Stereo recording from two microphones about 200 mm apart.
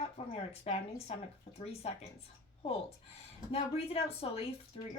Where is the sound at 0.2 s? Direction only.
30° left (ahead or behind).